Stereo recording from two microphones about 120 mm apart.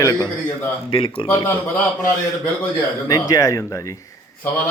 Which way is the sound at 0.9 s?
45° left (ahead or behind).